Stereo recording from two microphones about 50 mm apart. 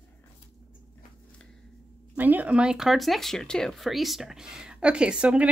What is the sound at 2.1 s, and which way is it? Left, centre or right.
Speech, right.